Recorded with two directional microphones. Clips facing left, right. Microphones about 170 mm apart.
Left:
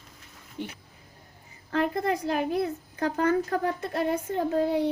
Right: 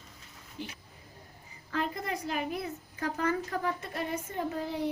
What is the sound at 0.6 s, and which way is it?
A woman's voice, 60° left (ahead or behind).